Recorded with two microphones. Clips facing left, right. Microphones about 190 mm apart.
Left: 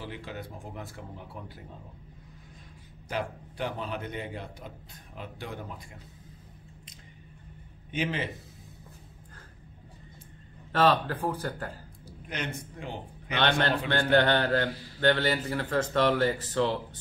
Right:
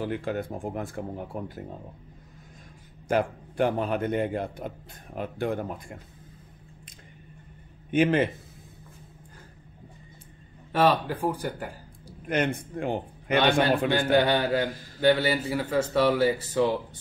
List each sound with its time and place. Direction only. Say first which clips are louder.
0.0 s a man's voice: right 10 dB; 50° right (ahead or behind)
3.1 s a man's voice: right 8 dB; 50° right (ahead or behind)
7.9 s a man's voice: right 10 dB; 55° right (ahead or behind)
10.7 s speech: right 2 dB; 10° right (ahead or behind)
12.3 s a man's voice: right 10 dB; 55° right (ahead or behind)
13.3 s speech: right 5 dB; 10° right (ahead or behind)